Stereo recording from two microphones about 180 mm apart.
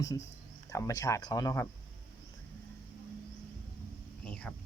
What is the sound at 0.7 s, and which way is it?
Speech, 15° left (ahead or behind).